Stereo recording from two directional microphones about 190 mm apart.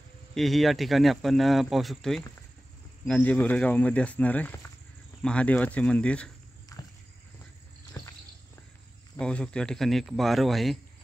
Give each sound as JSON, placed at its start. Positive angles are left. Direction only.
{"t": 0.3, "sound": "speech", "side_deg": 0}
{"t": 6.7, "sound": "a sound", "side_deg": 15}
{"t": 9.2, "sound": "speech", "side_deg": 5}